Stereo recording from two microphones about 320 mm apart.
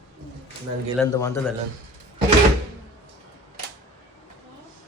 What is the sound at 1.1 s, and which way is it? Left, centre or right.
Speech, centre.